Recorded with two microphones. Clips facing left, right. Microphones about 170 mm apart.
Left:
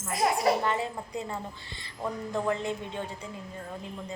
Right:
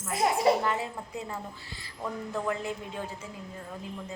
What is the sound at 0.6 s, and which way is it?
A woman's voice, 5° right (ahead or behind).